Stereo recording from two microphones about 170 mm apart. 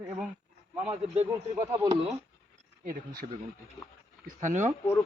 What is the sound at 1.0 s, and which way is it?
Speech, 40° right (ahead or behind).